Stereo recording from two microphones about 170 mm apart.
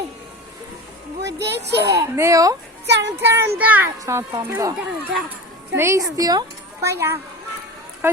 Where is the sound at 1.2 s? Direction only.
85° right.